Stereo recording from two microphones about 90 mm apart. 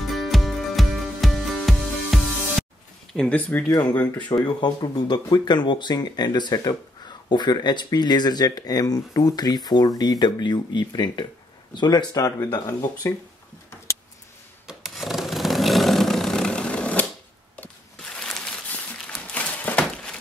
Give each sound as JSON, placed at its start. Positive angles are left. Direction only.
{"t": 0.0, "sound": "music", "side_deg": 0}
{"t": 3.2, "sound": "speech", "side_deg": 10}
{"t": 4.5, "sound": "speech", "side_deg": 50}
{"t": 14.7, "sound": "a sound", "side_deg": -5}
{"t": 18.1, "sound": "crumpling", "side_deg": 5}
{"t": 18.7, "sound": "a sound", "side_deg": 15}